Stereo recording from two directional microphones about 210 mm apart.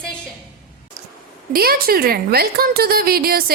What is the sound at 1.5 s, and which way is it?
A woman's voice, 45° right (ahead or behind).